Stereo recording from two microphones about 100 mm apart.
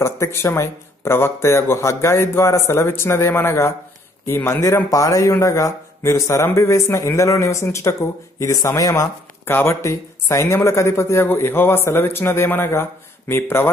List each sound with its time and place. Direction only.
0.0 s a man's voice: 25° left (ahead or behind)
9.5 s a man's voice: 20° left (ahead or behind)